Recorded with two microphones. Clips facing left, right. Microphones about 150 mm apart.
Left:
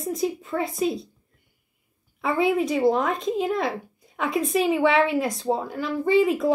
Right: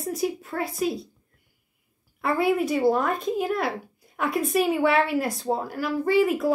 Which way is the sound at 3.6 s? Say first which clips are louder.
Left 1 dB; 5° right (ahead or behind).